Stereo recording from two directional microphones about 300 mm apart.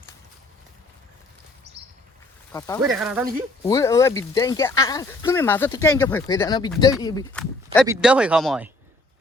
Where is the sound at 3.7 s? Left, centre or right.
Centre.